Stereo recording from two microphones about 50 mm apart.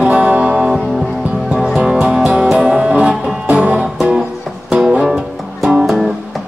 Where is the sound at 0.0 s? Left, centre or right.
Right.